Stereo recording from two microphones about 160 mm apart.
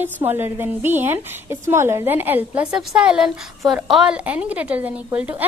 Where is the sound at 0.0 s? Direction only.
15° right (ahead or behind).